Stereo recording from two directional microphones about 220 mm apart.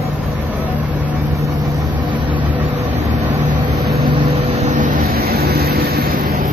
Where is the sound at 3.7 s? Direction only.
Centre (ahead or behind).